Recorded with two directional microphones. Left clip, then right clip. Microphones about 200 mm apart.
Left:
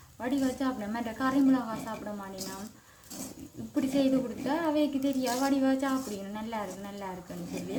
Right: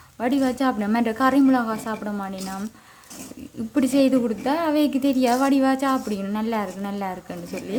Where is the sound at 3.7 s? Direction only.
50° right (ahead or behind).